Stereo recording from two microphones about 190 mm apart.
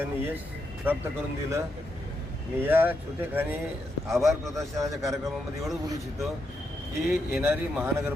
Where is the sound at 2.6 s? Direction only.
10° right (ahead or behind).